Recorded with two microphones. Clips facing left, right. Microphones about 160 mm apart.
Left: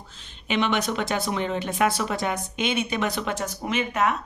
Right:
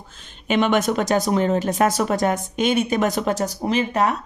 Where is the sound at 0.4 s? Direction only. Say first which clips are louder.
Right 6 dB; 45° right (ahead or behind).